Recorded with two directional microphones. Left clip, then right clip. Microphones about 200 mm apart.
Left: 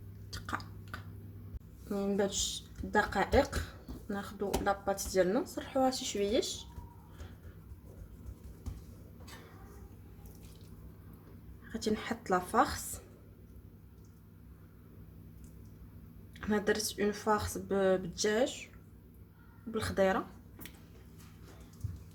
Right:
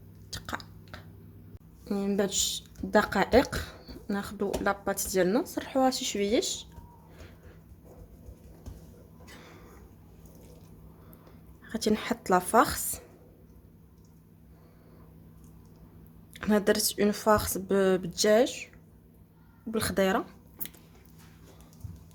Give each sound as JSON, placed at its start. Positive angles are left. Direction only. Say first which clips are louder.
{"t": 0.3, "sound": "chewing", "louder": "right 2 dB", "side_deg": -30}
{"t": 1.9, "sound": "speech", "louder": "right 3 dB", "side_deg": -55}
{"t": 11.7, "sound": "speech", "louder": "right 6 dB", "side_deg": -45}
{"t": 16.3, "sound": "speech", "louder": "right 6 dB", "side_deg": -50}
{"t": 19.7, "sound": "speech", "louder": "right 3 dB", "side_deg": -55}